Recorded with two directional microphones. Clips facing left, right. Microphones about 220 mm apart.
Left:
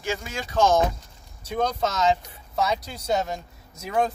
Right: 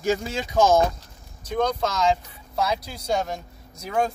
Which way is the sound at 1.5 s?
5° left (ahead or behind).